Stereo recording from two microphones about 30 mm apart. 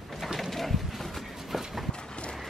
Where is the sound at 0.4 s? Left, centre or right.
Centre.